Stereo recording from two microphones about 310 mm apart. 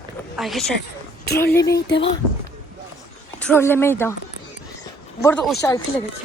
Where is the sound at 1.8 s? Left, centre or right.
Left.